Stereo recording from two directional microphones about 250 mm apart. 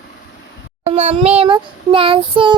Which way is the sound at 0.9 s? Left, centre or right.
Right.